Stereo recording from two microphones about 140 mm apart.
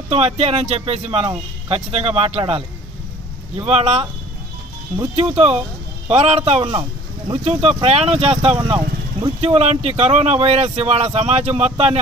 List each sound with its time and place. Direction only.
0.1 s speech: 45° right (ahead or behind)
1.2 s speech: 30° right (ahead or behind)
1.9 s speech: 45° right (ahead or behind)
3.6 s speech: 45° right (ahead or behind)
5.1 s speech: 45° right (ahead or behind)
6.7 s a sound: 30° right (ahead or behind)
7.4 s speech: 45° right (ahead or behind)